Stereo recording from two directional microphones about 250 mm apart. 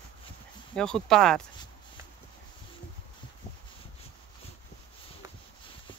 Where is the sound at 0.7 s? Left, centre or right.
Centre.